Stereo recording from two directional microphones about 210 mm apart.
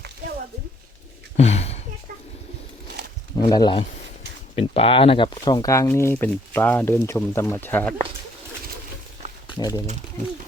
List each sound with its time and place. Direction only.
1.4 s a sound: 30° left (ahead or behind)
3.3 s speech: 20° left (ahead or behind)
9.6 s speech: 15° left (ahead or behind)